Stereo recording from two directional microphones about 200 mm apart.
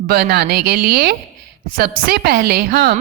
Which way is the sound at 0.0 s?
50° right (ahead or behind).